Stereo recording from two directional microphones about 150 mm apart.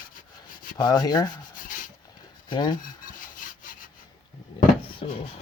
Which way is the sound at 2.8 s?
65° left (ahead or behind).